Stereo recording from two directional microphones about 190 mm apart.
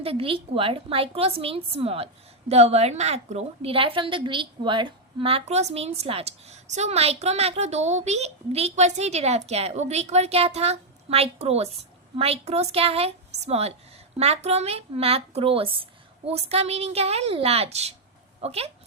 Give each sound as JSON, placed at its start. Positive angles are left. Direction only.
{"t": 0.0, "sound": "a woman's voice", "side_deg": -30}